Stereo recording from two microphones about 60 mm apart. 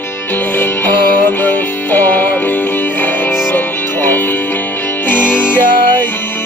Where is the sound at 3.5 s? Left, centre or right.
Left.